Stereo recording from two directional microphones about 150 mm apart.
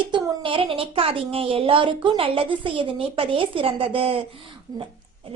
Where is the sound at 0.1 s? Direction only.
35° right (ahead or behind).